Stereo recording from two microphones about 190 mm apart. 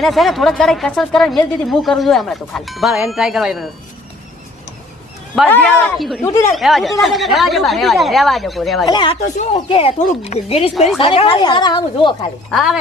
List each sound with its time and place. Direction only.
0.0 s speech: centre (ahead or behind)
5.3 s speech: 10° left (ahead or behind)
8.9 s a woman's voice: 25° left (ahead or behind)
12.5 s speech: centre (ahead or behind)